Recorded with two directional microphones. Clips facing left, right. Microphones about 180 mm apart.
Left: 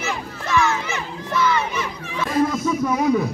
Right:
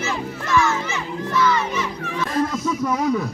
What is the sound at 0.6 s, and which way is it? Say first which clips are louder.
Children playing: even; 65° left (ahead or behind).